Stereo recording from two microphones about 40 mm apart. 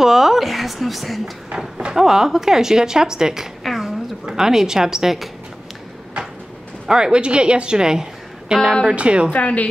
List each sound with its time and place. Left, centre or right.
0.0 s a woman's voice: centre
3.6 s a sound: centre
4.3 s speech: centre
6.9 s a woman's voice: right
8.8 s a woman's voice: right
9.3 s a woman's voice: left